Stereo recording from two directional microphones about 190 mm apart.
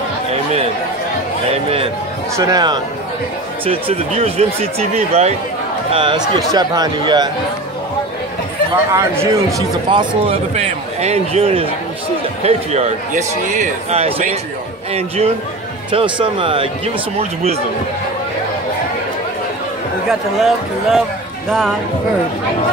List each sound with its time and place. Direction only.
1.5 s speech: 30° right (ahead or behind)
2.3 s a man's voice: 20° right (ahead or behind); by 5.3 s 35° right (ahead or behind)
5.9 s speech: 25° right (ahead or behind)
8.9 s a man's voice: 15° right (ahead or behind); by 14.3 s 30° right (ahead or behind)
15.9 s speech: 25° right (ahead or behind)
20.1 s a man's voice: centre (ahead or behind)